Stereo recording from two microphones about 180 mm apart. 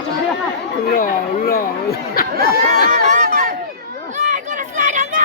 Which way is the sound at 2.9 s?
55° right (ahead or behind).